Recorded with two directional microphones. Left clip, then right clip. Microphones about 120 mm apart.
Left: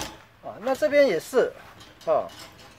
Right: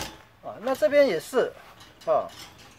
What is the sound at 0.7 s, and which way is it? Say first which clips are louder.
Speech: even; 5° left (ahead or behind).